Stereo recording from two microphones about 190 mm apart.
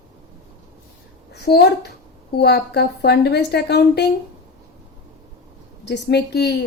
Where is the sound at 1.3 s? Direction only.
60° left (ahead or behind).